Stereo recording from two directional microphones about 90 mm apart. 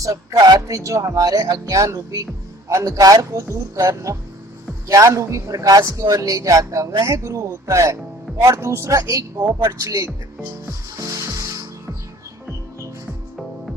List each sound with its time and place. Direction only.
0.0 s a man's voice: 40° right (ahead or behind)
10.9 s music: 35° right (ahead or behind)